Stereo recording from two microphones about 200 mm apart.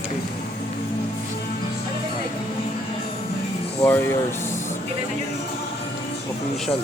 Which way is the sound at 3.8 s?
10° left (ahead or behind).